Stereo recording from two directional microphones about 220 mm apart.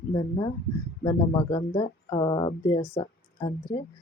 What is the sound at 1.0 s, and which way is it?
Speech, 15° left (ahead or behind).